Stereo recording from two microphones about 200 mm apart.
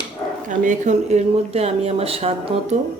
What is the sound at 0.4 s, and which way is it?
Speech, 40° right (ahead or behind).